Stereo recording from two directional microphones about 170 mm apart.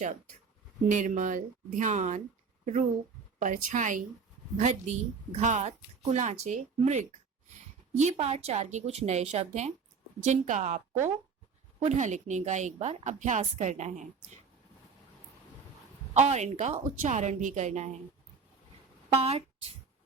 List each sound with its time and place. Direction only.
0.9 s a woman's voice: 50° right (ahead or behind)
3.3 s a woman's voice: 45° right (ahead or behind)
8.1 s a woman's voice: 35° right (ahead or behind)
16.1 s a woman's voice: 40° right (ahead or behind)
19.1 s a woman's voice: 35° right (ahead or behind)